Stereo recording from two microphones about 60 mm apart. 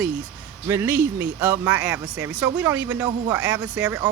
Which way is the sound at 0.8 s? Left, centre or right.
Right.